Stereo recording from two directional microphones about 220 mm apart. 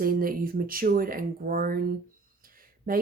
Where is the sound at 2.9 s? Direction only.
40° right (ahead or behind).